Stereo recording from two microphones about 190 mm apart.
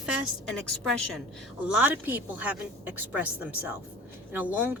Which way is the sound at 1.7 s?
10° right (ahead or behind).